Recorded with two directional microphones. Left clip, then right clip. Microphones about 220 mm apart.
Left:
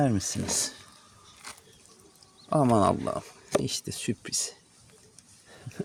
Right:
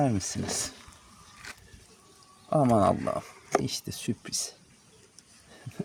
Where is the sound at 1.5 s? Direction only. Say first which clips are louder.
Even; 45° left (ahead or behind).